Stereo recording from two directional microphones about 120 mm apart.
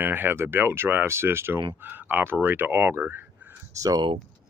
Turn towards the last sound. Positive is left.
turn(degrees=-30)  # may be behind; listen again after turning